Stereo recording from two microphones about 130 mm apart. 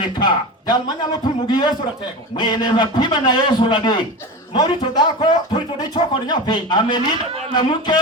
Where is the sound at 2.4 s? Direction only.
35° left (ahead or behind).